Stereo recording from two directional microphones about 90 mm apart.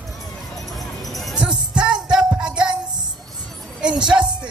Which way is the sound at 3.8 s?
10° right (ahead or behind).